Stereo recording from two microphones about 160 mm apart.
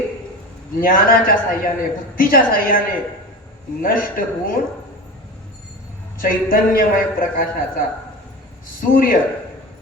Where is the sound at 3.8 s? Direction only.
60° left (ahead or behind).